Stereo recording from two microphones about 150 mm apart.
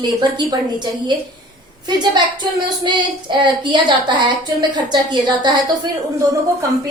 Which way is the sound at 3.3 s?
30° right (ahead or behind).